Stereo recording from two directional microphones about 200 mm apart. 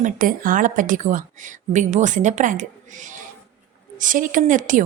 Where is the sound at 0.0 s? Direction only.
45° right (ahead or behind).